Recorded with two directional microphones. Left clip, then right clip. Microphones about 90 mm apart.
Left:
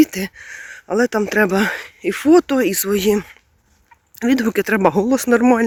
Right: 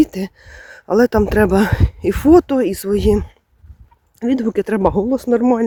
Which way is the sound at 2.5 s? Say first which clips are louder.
Even; 35° right (ahead or behind).